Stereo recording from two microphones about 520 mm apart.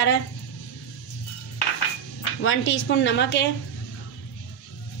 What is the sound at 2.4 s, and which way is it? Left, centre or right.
Speech, left.